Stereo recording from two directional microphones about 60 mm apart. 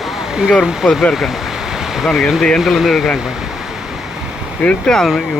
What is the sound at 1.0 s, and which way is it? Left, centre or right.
Speech, centre.